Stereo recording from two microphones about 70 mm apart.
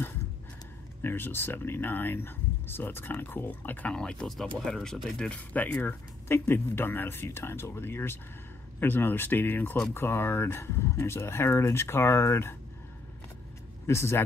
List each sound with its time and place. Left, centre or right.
1.0 s speech: left
3.9 s speech: centre
5.3 s speech: left
13.8 s speech: left